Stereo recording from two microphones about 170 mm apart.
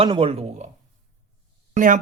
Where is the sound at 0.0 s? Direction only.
35° right (ahead or behind).